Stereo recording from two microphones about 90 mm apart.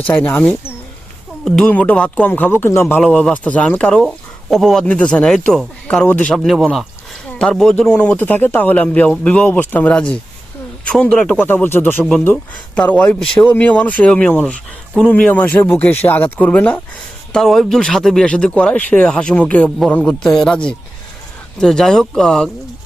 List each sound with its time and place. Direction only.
0.0 s speech: 15° left (ahead or behind)
1.5 s speech: 5° left (ahead or behind); by 2.8 s 25° left (ahead or behind)
3.0 s speech: 10° left (ahead or behind)
6.1 s speech: 15° left (ahead or behind)
6.3 s speech: 5° left (ahead or behind)
11.3 s speech: 20° left (ahead or behind)
17.3 s speech: 5° left (ahead or behind)
20.1 s speech: 5° left (ahead or behind)